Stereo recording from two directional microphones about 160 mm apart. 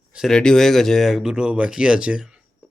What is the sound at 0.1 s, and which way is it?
Speech, centre (ahead or behind).